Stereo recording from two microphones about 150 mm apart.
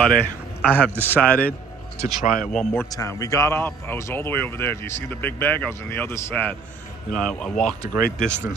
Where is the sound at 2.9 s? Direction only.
20° left (ahead or behind); by 7.8 s 5° left (ahead or behind).